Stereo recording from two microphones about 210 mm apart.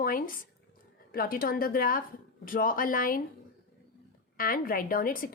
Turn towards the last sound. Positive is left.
turn(degrees=40)  # may be behind; listen again after turning